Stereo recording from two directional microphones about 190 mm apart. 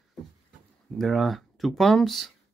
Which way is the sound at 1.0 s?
Centre (ahead or behind).